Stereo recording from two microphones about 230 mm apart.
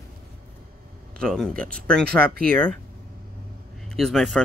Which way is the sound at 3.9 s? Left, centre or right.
Centre.